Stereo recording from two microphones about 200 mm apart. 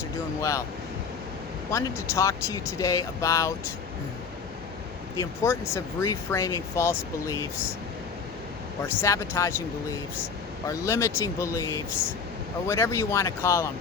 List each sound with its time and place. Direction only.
1.7 s speech: 15° left (ahead or behind)
5.1 s speech: 15° left (ahead or behind)
8.9 s speech: 15° left (ahead or behind)